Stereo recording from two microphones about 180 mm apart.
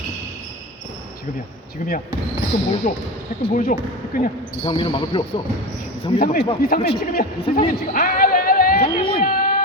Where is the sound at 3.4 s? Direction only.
30° left (ahead or behind).